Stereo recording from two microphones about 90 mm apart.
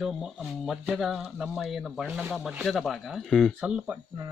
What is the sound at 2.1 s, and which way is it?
Speech, 15° right (ahead or behind).